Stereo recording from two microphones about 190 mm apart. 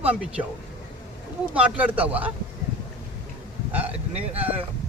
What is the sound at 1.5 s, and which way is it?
Speech, 5° right (ahead or behind).